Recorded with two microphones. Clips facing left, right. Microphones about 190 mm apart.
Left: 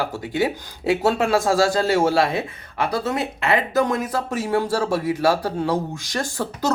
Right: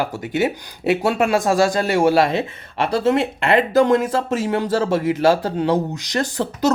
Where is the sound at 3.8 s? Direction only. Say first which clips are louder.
Right 5 dB; 30° right (ahead or behind).